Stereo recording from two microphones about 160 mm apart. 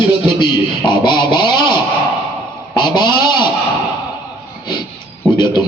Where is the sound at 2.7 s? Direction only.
25° left (ahead or behind).